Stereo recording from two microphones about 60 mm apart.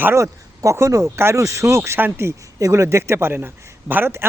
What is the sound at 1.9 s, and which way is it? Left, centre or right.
Speech, right.